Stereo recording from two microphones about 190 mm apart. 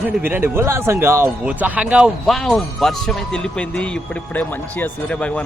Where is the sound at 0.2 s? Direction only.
10° right (ahead or behind).